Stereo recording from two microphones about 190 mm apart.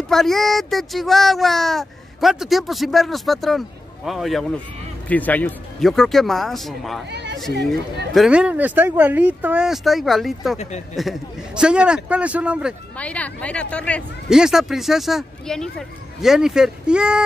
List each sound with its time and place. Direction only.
0.1 s speech: centre (ahead or behind)
7.1 s a sound: 60° right (ahead or behind)
8.1 s speech: 5° right (ahead or behind)
12.9 s speech: 5° left (ahead or behind)